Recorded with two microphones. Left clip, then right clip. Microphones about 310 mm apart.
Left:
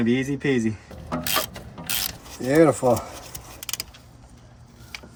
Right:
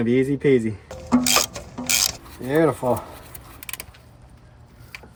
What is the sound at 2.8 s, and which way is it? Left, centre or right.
Speech, centre.